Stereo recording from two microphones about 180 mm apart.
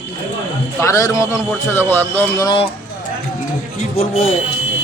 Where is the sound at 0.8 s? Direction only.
15° left (ahead or behind).